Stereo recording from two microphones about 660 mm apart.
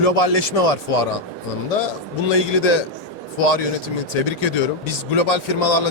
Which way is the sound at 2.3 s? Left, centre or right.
Left.